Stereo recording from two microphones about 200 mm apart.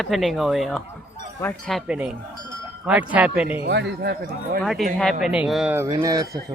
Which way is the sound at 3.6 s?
55° right (ahead or behind).